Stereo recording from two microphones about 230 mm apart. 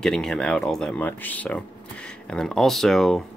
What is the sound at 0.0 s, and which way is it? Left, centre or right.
Speech, centre.